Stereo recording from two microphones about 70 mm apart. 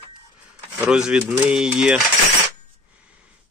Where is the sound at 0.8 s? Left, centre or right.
Centre.